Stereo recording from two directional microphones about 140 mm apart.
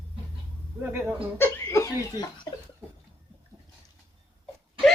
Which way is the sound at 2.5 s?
20° left (ahead or behind).